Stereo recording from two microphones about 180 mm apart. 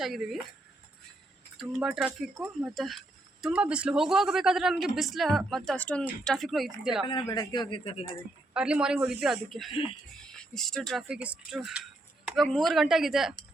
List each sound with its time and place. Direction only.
0.0 s speech: centre (ahead or behind)
1.5 s speech: 5° right (ahead or behind)
7.0 s speech: 25° left (ahead or behind)
8.5 s speech: 5° right (ahead or behind)
12.2 s a sound: 5° right (ahead or behind)
12.5 s speech: centre (ahead or behind)